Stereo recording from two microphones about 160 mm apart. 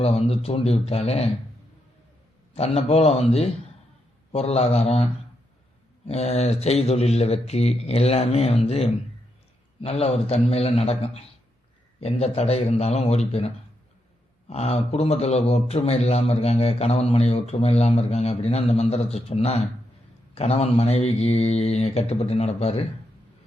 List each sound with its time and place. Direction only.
0.0 s a man's voice: 40° left (ahead or behind)
2.6 s a man's voice: 40° left (ahead or behind)
6.1 s a man's voice: 40° left (ahead or behind)